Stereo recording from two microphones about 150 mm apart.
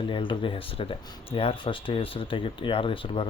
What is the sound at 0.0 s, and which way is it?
Speech, 35° left (ahead or behind).